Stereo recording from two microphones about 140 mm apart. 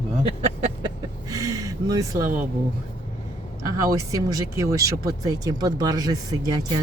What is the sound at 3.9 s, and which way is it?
Speech, 25° right (ahead or behind).